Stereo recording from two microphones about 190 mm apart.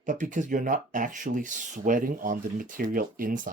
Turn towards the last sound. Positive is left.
turn(degrees=-45)  # may be behind; listen again after turning